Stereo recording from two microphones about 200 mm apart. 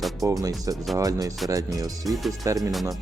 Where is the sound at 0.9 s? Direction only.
15° right (ahead or behind).